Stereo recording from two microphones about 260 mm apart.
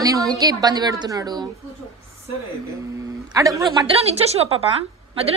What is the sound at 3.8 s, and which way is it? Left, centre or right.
Speech, right.